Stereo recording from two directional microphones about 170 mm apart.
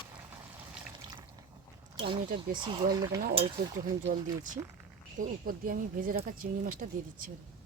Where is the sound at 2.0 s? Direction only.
30° right (ahead or behind).